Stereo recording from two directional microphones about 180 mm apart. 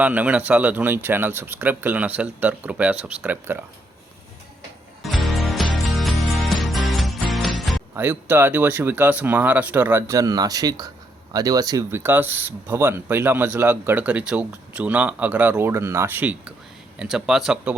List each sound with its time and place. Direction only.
0.0 s speech: 10° right (ahead or behind)
5.0 s music: centre (ahead or behind)
7.9 s speech: 10° right (ahead or behind)